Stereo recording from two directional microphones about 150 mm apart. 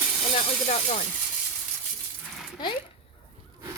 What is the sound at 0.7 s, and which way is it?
Speech, 50° left (ahead or behind).